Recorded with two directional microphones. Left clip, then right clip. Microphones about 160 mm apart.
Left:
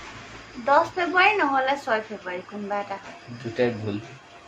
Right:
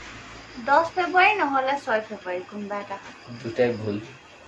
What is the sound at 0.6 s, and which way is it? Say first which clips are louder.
A woman's voice: even; 20° left (ahead or behind).